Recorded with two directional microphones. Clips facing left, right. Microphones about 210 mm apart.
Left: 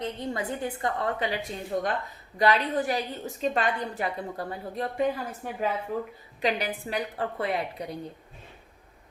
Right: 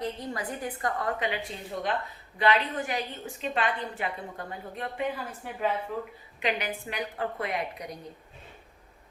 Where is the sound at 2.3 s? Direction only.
40° left (ahead or behind).